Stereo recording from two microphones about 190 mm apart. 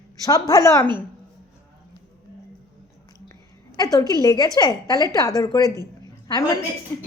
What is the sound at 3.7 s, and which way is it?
A woman's voice, 20° left (ahead or behind).